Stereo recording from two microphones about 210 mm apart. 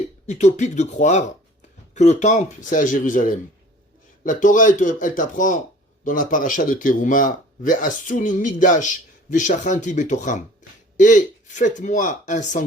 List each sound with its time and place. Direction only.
0.3 s speech: 35° left (ahead or behind)